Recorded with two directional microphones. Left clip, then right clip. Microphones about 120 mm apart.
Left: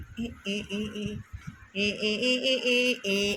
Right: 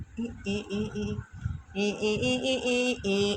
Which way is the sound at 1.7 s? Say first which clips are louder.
Even; 10° right (ahead or behind).